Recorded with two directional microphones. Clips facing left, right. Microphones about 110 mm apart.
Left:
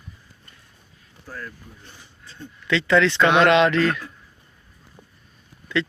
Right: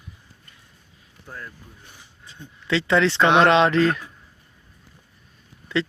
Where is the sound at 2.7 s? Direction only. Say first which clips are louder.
Left 1 dB; 25° right (ahead or behind).